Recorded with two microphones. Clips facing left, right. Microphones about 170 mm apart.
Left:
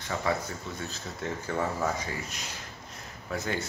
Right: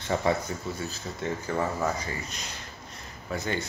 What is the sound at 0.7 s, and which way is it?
Speech, centre (ahead or behind).